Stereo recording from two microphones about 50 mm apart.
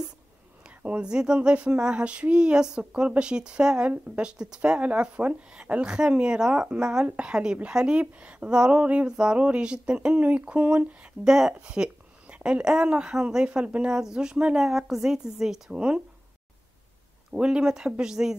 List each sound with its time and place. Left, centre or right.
0.7 s a sound: right
1.0 s a woman's voice: centre
8.8 s speech: right
11.2 s a woman's voice: centre
11.5 s a sound: right
12.6 s a woman's voice: centre
17.3 s a woman's voice: centre